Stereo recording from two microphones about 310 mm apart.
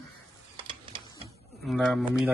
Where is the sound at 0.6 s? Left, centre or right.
Centre.